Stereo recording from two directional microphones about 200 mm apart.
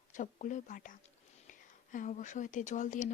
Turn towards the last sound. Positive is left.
turn(degrees=40)  # may be behind; listen again after turning